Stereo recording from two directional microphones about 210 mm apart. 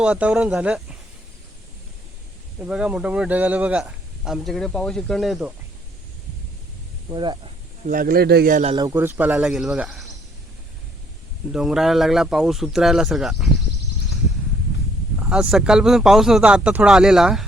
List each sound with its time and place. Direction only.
0.0 s speech: 5° right (ahead or behind)
2.6 s speech: 5° right (ahead or behind)
7.1 s speech: 20° right (ahead or behind)
7.9 s a man's voice: 40° right (ahead or behind)
8.7 s speech: 15° right (ahead or behind); by 10.1 s centre (ahead or behind)
11.5 s speech: centre (ahead or behind)
15.2 s speech: 5° right (ahead or behind)